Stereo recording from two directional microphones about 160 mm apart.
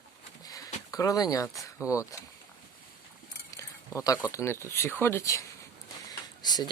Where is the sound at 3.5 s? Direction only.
20° left (ahead or behind).